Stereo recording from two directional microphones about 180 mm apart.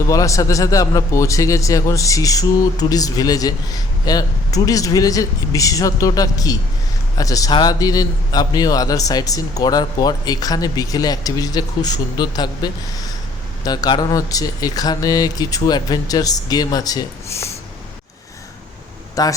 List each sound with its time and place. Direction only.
0.1 s a man's voice: 20° left (ahead or behind)
19.2 s a man's voice: 20° left (ahead or behind)